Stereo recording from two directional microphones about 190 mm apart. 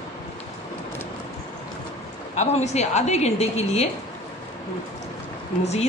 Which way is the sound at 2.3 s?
35° left (ahead or behind).